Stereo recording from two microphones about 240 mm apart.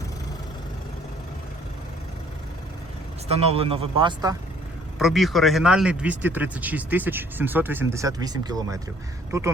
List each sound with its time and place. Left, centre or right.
3.2 s speech: right
4.9 s a man's voice: centre